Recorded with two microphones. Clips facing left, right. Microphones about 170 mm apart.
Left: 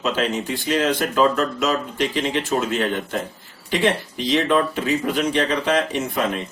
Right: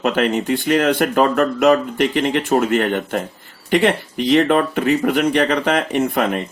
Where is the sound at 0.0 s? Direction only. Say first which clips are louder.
Right 5 dB; 60° right (ahead or behind).